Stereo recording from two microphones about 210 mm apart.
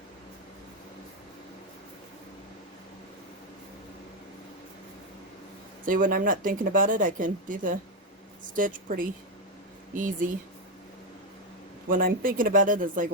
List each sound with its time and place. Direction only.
5.8 s speech: 40° right (ahead or behind)
11.9 s speech: 40° right (ahead or behind)